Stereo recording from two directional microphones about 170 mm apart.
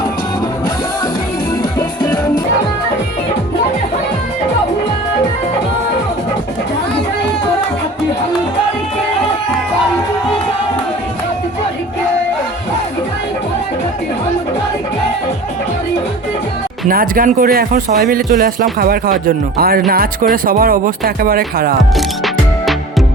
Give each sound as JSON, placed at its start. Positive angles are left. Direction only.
{"t": 16.9, "sound": "speech", "side_deg": -55}
{"t": 21.9, "sound": "music", "side_deg": 0}